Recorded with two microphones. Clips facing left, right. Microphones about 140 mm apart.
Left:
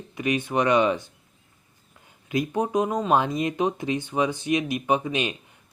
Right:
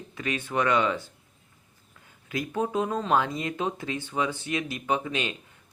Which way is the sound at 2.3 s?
20° left (ahead or behind).